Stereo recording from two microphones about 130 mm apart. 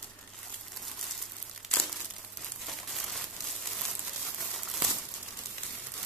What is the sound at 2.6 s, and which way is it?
Crumpling, centre (ahead or behind).